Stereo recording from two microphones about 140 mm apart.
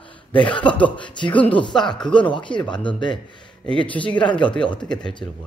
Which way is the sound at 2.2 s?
35° left (ahead or behind).